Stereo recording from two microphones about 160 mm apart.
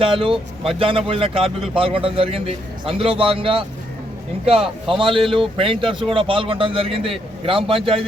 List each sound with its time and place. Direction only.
0.0 s speech: 35° right (ahead or behind)